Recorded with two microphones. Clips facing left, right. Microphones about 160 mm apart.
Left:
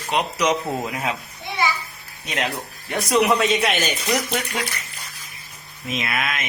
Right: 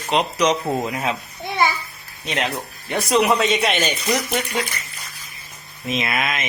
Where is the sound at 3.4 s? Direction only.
Centre (ahead or behind).